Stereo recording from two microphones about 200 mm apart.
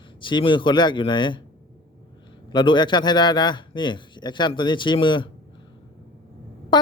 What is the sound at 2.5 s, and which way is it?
A man's voice, 20° left (ahead or behind).